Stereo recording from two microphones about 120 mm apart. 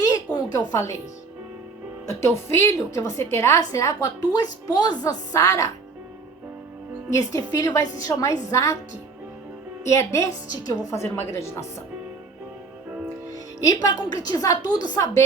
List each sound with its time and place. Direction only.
0.3 s a sound: 10° left (ahead or behind)
2.0 s a woman's voice: 20° left (ahead or behind)
7.1 s a woman's voice: 25° left (ahead or behind)
9.8 s a woman's voice: 20° left (ahead or behind)
13.3 s a woman's voice: 30° left (ahead or behind)